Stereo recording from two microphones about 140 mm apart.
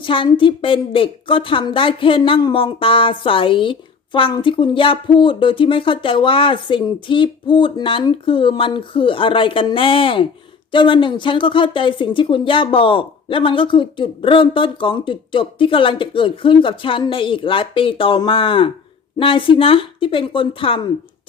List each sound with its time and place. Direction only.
0.0 s a woman's voice: 35° left (ahead or behind)